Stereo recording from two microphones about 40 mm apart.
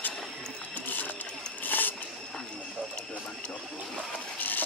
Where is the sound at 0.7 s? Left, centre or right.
Left.